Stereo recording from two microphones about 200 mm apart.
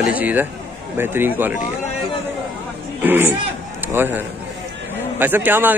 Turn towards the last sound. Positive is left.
turn(degrees=-10)  # may be behind; listen again after turning